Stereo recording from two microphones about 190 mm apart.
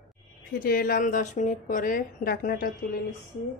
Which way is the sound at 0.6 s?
50° left (ahead or behind).